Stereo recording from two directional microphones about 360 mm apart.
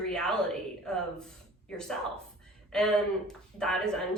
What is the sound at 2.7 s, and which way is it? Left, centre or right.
A woman's voice, centre.